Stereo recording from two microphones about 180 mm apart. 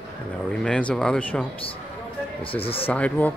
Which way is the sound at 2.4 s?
30° left (ahead or behind).